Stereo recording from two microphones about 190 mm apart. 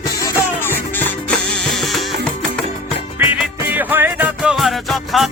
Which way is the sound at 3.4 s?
10° right (ahead or behind).